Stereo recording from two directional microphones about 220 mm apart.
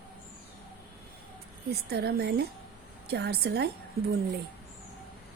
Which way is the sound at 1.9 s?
45° right (ahead or behind).